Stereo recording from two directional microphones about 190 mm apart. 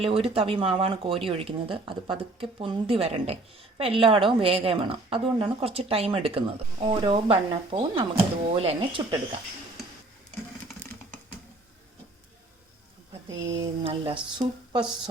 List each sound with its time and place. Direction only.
0.0 s a woman's voice: 30° right (ahead or behind)
13.3 s speech: 80° right
13.8 s a woman's voice: 25° right (ahead or behind)